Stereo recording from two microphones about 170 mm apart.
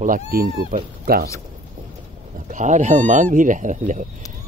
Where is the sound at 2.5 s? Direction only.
45° right (ahead or behind).